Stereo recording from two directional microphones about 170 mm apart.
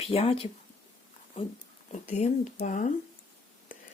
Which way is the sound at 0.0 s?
35° left (ahead or behind).